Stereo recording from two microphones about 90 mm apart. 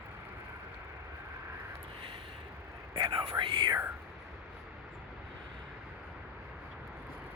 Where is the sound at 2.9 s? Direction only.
65° right (ahead or behind).